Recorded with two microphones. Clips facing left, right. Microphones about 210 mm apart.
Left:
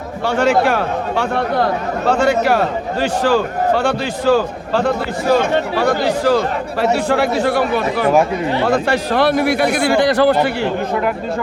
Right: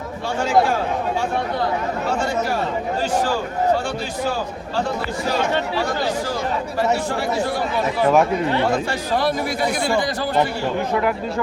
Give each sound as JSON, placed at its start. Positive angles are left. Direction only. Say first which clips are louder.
{"t": 0.3, "sound": "a man's voice", "louder": "left 4 dB", "side_deg": 70}